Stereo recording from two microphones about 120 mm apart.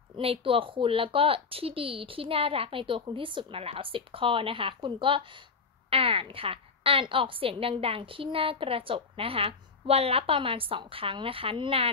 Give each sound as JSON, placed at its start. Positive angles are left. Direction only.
{"t": 0.2, "sound": "a woman's voice", "side_deg": -50}